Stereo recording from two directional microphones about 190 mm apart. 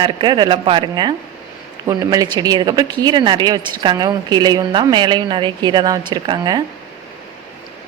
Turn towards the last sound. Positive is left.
turn(degrees=-20)  # may be behind; listen again after turning